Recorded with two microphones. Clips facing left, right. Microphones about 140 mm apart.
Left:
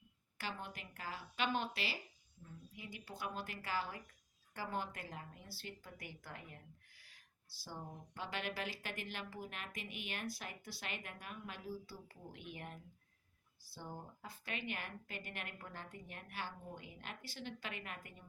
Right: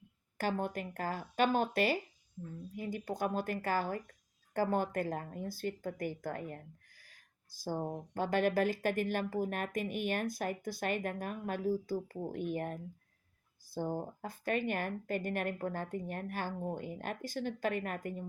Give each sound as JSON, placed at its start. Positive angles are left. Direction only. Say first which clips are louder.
{"t": 0.3, "sound": "speech", "louder": "right 12 dB", "side_deg": -45}
{"t": 7.0, "sound": "a sound", "louder": "right 4 dB", "side_deg": -45}
{"t": 8.1, "sound": "speech", "louder": "right 13 dB", "side_deg": -45}